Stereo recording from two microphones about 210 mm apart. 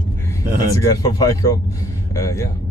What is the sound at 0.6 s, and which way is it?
Speech, 15° left (ahead or behind).